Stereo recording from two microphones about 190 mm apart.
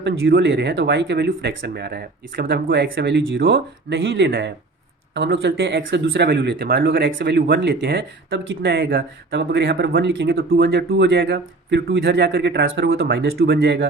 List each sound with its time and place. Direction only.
0.0 s speech: 65° right (ahead or behind)
4.3 s speech: 55° right (ahead or behind)
5.1 s speech: 65° right (ahead or behind)